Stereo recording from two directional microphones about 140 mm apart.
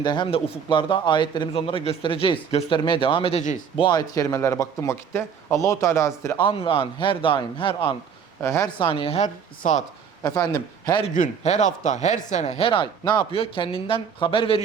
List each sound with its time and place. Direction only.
0.0 s a man's voice: 35° left (ahead or behind)
6.4 s a man's voice: 40° left (ahead or behind)
8.4 s speech: 20° left (ahead or behind)
8.8 s a woman's voice: 40° left (ahead or behind); by 9.8 s 60° left (ahead or behind)
10.2 s speech: 25° left (ahead or behind)
11.1 s a man's voice: 60° left (ahead or behind); by 14.6 s 40° left (ahead or behind)